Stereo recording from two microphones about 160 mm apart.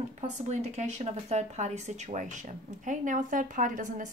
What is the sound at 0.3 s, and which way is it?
Speech, 45° right (ahead or behind).